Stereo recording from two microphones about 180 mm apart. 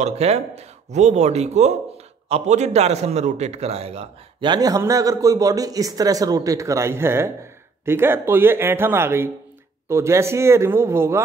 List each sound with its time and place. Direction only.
0.0 s a man's voice: 35° right (ahead or behind); by 11.1 s 15° right (ahead or behind)